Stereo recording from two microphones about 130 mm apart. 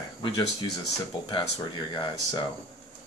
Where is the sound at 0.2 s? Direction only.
40° left (ahead or behind).